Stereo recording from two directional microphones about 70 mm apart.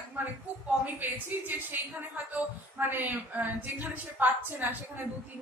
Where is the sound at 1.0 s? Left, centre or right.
Right.